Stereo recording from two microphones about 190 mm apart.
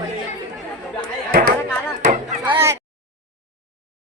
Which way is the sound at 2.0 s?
40° right (ahead or behind).